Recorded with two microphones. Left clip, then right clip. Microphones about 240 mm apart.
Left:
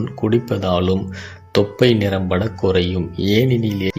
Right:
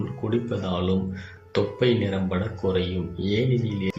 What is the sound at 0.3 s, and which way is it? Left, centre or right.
Speech, left.